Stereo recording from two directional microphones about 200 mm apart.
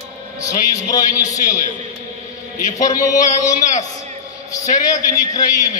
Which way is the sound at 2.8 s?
15° left (ahead or behind).